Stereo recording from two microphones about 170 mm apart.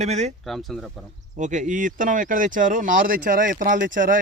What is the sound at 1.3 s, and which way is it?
Speech, 45° right (ahead or behind).